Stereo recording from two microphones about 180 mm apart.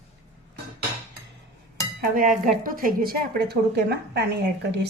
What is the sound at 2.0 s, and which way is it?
A woman's voice, 50° right (ahead or behind).